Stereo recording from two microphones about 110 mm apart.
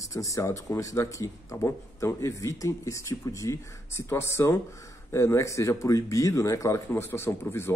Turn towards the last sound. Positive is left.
turn(degrees=25)  # may be behind; listen again after turning